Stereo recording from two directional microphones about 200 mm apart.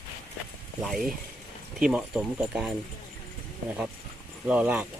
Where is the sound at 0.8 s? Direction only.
Centre (ahead or behind).